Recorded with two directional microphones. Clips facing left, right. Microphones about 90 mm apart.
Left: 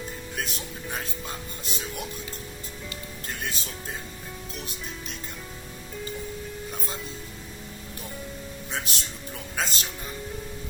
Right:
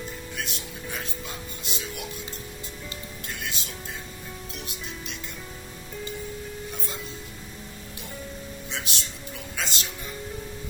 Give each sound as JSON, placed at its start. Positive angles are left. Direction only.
{"t": 0.3, "sound": "speech", "side_deg": 40}
{"t": 3.2, "sound": "speech", "side_deg": 40}
{"t": 8.7, "sound": "speech", "side_deg": 40}